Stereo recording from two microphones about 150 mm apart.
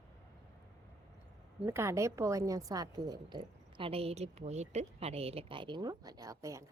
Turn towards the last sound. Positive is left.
turn(degrees=-20)  # may be behind; listen again after turning